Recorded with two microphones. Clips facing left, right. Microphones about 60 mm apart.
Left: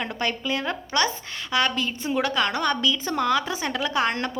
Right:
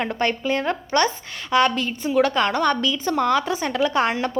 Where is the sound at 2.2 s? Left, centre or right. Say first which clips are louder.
Right 5 dB; right.